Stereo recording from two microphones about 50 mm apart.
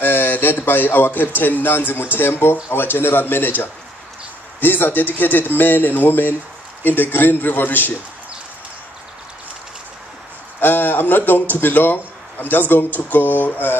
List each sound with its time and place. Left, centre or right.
0.0 s speech: left
10.6 s speech: left